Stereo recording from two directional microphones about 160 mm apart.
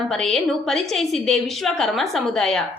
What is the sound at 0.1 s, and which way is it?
A woman's voice, centre (ahead or behind).